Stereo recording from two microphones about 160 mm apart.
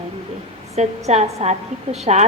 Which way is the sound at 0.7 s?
45° right (ahead or behind).